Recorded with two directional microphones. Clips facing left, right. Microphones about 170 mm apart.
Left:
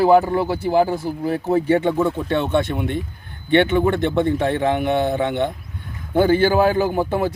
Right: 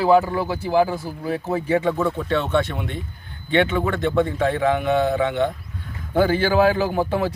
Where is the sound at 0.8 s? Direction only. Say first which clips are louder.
Left 4 dB; 25° left (ahead or behind).